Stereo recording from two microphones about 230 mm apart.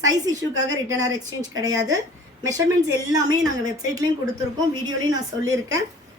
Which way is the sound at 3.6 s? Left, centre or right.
Centre.